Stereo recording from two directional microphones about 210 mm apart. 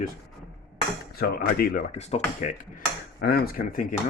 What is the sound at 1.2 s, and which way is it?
Speech, 45° left (ahead or behind).